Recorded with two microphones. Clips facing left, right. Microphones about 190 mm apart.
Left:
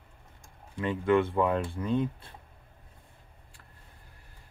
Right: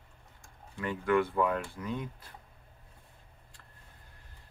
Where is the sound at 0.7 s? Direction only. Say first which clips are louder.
Left 3 dB; 25° left (ahead or behind).